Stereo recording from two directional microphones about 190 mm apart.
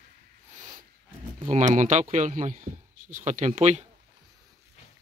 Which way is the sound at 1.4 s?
35° right (ahead or behind).